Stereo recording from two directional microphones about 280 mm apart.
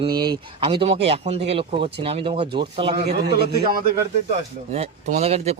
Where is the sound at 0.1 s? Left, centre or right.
Right.